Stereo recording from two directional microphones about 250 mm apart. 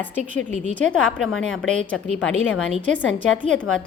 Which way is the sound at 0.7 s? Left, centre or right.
Centre.